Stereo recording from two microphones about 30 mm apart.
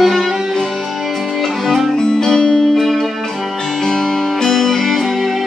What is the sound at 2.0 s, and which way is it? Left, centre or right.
Music, left.